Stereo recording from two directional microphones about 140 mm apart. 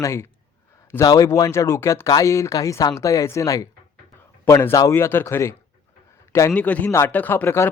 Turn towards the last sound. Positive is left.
turn(degrees=15)  # may be behind; listen again after turning